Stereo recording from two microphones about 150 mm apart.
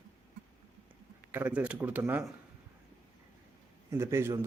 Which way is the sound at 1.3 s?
10° right (ahead or behind).